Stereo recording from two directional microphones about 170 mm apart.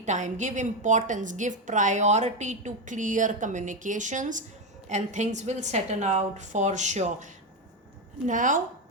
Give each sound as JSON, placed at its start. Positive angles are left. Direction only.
{"t": 0.0, "sound": "a woman's voice", "side_deg": -45}
{"t": 8.3, "sound": "a woman's voice", "side_deg": -50}